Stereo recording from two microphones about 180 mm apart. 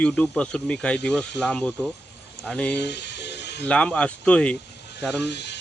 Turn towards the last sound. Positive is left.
turn(degrees=70)  # may be behind; listen again after turning